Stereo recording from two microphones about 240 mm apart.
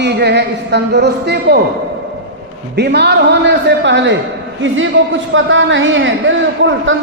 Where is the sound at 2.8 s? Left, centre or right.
Right.